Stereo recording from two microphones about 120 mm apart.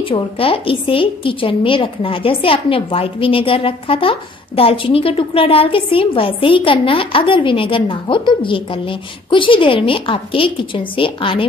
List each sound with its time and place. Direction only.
0.0 s a woman's voice: 45° left (ahead or behind)